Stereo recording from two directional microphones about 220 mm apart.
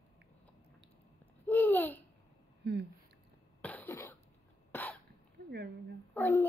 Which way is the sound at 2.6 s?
50° right (ahead or behind).